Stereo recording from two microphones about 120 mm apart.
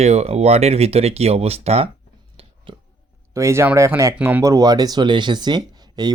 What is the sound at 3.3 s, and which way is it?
Speech, 25° right (ahead or behind).